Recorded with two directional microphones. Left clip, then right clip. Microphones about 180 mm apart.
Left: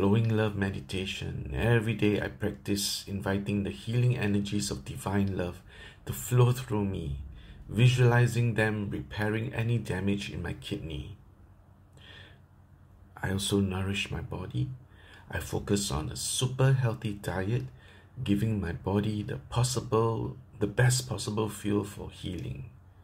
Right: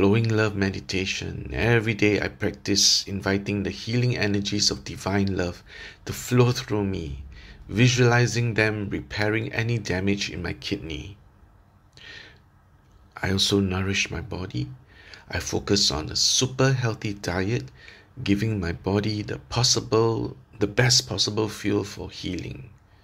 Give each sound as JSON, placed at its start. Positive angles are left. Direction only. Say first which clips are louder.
{"t": 0.0, "sound": "speech", "louder": "right 6 dB", "side_deg": -40}
{"t": 12.0, "sound": "a sound", "louder": "right 9 dB", "side_deg": -40}
{"t": 13.1, "sound": "speech", "louder": "right 8 dB", "side_deg": -40}